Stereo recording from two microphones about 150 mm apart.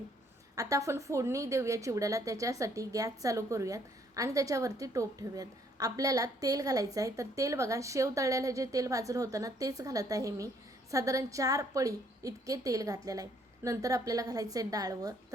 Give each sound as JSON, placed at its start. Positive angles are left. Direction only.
{"t": 0.5, "sound": "a woman's voice", "side_deg": -20}